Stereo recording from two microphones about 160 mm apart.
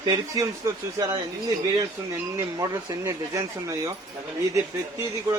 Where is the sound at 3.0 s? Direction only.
20° right (ahead or behind).